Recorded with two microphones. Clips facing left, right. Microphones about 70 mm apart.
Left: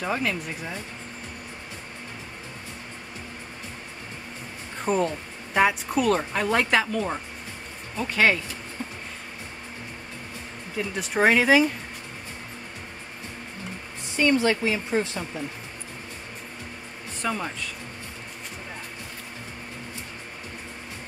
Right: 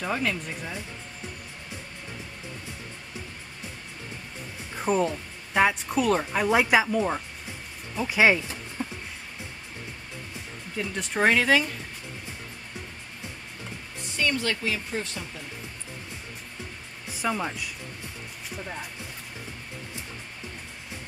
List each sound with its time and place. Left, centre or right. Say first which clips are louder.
0.0 s a woman's voice: left 1 dB; centre
4.7 s a woman's voice: even; centre
8.8 s music: right 3 dB; centre
10.8 s speech: left 2 dB; centre
14.1 s a woman's voice: left 6 dB; left
17.2 s speech: right 1 dB; centre